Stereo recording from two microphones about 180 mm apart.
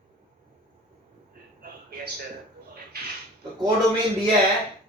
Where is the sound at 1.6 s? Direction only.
60° right (ahead or behind).